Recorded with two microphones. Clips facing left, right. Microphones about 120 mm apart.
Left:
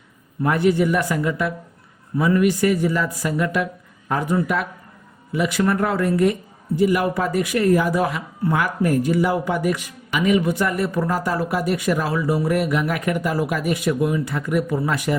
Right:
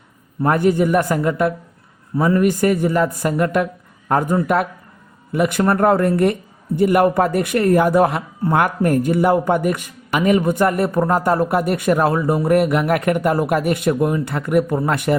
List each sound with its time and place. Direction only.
0.4 s speech: 45° right (ahead or behind)